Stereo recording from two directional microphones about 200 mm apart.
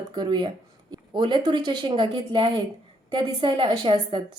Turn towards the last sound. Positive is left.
turn(degrees=-25)  # may be behind; listen again after turning